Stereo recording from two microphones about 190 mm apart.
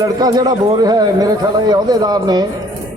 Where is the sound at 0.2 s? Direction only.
20° right (ahead or behind).